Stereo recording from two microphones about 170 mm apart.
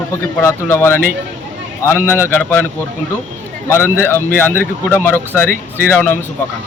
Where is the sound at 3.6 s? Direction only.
15° left (ahead or behind).